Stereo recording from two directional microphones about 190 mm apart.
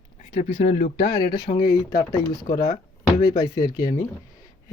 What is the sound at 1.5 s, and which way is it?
Speech, 50° left (ahead or behind).